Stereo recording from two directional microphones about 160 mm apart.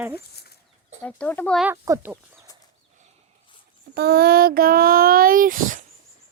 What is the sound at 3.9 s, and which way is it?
Speech, 75° right (ahead or behind).